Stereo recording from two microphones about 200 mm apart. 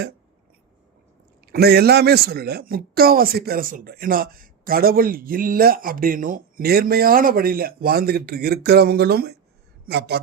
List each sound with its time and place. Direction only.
1.5 s speech: 50° right (ahead or behind)